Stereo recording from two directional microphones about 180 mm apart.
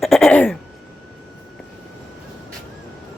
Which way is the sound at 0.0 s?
Centre (ahead or behind).